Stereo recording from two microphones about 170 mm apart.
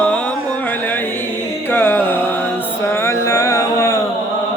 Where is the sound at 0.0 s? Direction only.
5° left (ahead or behind).